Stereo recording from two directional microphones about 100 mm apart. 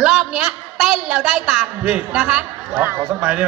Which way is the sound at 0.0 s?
5° right (ahead or behind).